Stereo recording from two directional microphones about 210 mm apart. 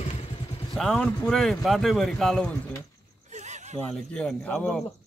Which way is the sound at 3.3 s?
35° right (ahead or behind).